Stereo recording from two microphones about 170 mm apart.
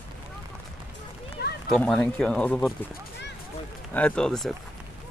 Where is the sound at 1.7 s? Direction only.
5° left (ahead or behind).